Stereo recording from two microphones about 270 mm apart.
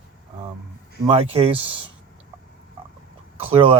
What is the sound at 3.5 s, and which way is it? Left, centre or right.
Speech, right.